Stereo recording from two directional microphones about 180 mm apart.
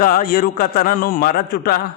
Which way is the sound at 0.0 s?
50° left (ahead or behind).